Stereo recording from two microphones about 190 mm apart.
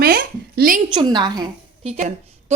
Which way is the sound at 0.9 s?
25° right (ahead or behind).